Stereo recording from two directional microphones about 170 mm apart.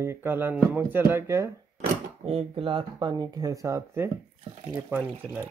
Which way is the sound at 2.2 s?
35° right (ahead or behind).